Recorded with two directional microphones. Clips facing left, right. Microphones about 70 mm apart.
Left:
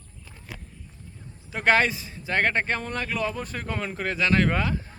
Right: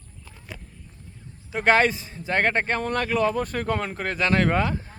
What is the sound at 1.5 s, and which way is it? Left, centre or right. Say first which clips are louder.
A man's voice: right 2 dB; right.